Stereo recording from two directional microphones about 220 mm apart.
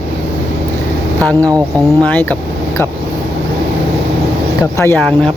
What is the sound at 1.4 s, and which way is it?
Speech, 15° right (ahead or behind).